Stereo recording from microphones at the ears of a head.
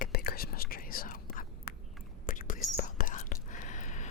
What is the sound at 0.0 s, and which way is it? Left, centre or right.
Whispering, left.